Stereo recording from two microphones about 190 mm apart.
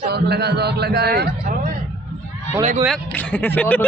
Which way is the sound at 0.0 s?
60° right (ahead or behind).